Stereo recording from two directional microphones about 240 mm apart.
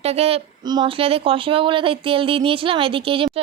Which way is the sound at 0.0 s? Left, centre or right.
Right.